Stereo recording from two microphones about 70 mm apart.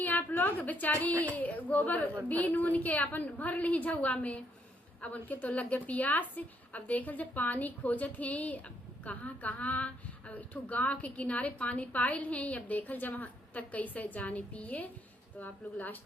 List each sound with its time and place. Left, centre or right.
0.0 s a woman's voice: left